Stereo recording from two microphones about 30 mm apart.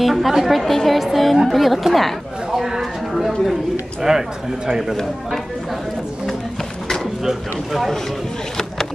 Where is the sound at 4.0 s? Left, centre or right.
Centre.